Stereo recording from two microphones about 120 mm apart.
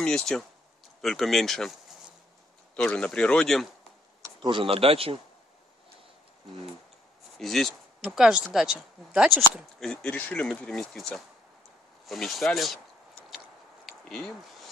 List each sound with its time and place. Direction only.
0.0 s speech: 5° left (ahead or behind)
4.2 s speech: 40° right (ahead or behind)
7.3 s speech: 5° left (ahead or behind)
9.8 s speech: 5° left (ahead or behind)
13.8 s a sound: 5° left (ahead or behind)